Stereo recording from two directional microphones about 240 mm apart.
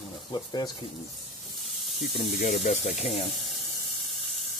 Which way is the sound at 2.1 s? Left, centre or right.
Left.